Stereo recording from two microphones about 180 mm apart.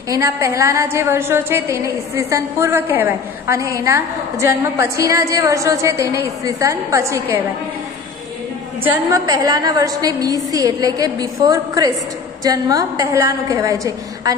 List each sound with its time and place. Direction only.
0.1 s a woman's voice: 15° right (ahead or behind)
8.8 s a woman's voice: 20° right (ahead or behind)